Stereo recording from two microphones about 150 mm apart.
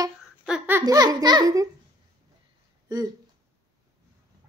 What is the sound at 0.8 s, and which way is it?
Speech, 25° right (ahead or behind).